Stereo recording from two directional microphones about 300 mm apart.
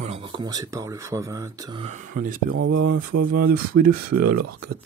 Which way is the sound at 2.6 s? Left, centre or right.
Right.